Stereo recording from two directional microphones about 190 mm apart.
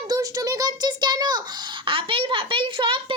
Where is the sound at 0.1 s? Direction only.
20° right (ahead or behind).